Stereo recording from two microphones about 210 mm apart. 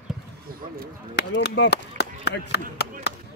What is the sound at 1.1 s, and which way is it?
Speech, 50° left (ahead or behind).